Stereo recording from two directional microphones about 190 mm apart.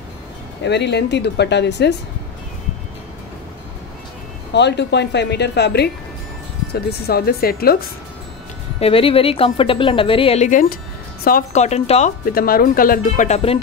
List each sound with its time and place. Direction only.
0.7 s speech: 65° left (ahead or behind)
4.6 s speech: 65° left (ahead or behind)
8.7 s a woman's voice: 30° left (ahead or behind)
12.3 s speech: 50° left (ahead or behind); by 13.6 s 35° left (ahead or behind)